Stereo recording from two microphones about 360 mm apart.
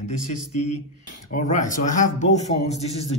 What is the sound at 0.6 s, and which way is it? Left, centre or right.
Mantra, left.